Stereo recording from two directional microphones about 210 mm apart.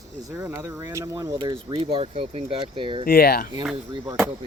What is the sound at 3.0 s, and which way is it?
Speech, 45° left (ahead or behind).